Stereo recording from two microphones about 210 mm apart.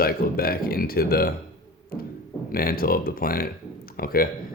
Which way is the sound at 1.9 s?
45° left (ahead or behind).